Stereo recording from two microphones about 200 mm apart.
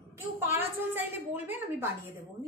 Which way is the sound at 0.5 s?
10° right (ahead or behind).